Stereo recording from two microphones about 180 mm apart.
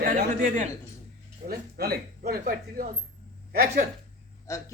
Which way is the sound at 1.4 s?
60° right (ahead or behind).